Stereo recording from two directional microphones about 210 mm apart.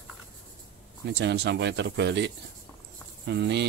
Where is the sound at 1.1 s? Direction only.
55° right (ahead or behind).